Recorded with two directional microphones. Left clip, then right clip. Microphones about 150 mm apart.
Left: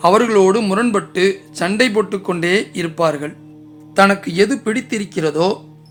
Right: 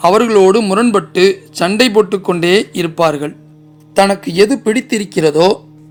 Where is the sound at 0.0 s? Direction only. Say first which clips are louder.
Right 3 dB; 30° right (ahead or behind).